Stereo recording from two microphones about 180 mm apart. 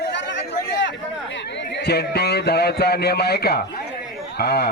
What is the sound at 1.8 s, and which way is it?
Speech, 65° left (ahead or behind).